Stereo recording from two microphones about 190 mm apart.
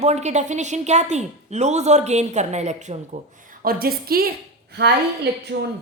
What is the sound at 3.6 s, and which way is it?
Speech, 50° right (ahead or behind).